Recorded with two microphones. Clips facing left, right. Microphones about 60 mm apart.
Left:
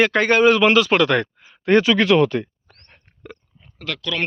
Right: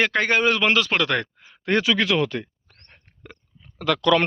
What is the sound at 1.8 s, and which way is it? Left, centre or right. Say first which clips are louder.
Speech: left 5 dB; left.